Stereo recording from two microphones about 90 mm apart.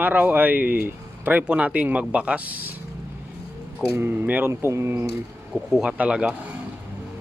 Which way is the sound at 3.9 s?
25° right (ahead or behind).